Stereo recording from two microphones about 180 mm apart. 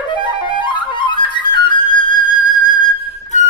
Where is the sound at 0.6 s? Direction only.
25° left (ahead or behind).